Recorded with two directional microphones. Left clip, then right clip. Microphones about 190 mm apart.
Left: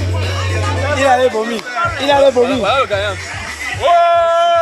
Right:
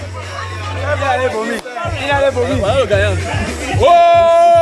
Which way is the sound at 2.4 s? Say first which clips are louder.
Left 1 dB; 5° right (ahead or behind).